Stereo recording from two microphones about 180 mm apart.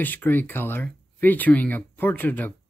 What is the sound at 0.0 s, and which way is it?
Speech, 10° left (ahead or behind).